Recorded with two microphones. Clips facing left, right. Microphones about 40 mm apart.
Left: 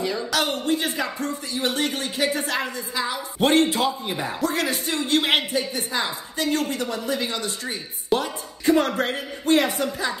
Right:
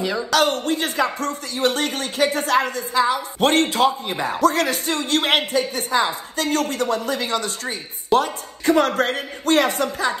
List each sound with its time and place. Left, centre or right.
0.3 s speech: right